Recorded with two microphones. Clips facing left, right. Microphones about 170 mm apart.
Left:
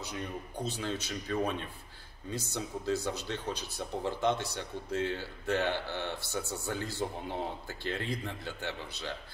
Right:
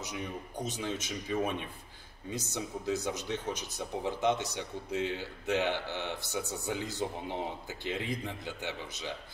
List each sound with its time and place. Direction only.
0.0 s speech: 15° right (ahead or behind)
2.5 s speech: 15° right (ahead or behind)